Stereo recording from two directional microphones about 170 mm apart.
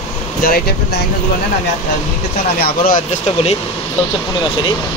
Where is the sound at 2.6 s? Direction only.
60° left (ahead or behind).